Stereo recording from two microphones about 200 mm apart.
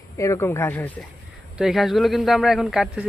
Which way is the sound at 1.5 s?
Centre (ahead or behind).